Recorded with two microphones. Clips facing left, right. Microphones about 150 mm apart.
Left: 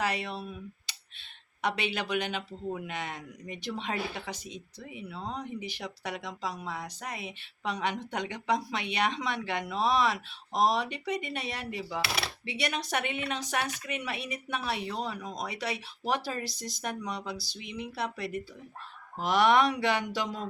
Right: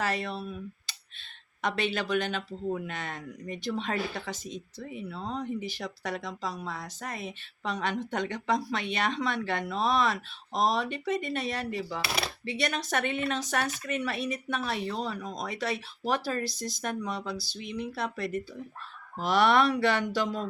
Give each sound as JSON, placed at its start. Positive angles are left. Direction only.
{"t": 0.0, "sound": "speech", "side_deg": 15}
{"t": 1.6, "sound": "speech", "side_deg": 15}
{"t": 5.7, "sound": "speech", "side_deg": 15}